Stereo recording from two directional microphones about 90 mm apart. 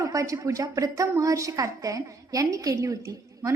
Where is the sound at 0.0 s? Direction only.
35° right (ahead or behind).